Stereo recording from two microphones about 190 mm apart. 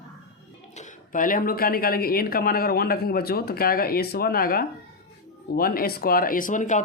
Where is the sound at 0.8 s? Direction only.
45° left (ahead or behind).